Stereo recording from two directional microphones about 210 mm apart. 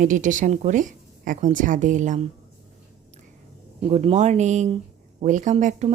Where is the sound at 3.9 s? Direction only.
30° right (ahead or behind).